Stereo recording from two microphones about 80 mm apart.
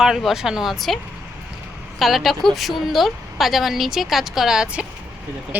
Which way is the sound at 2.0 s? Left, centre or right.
Centre.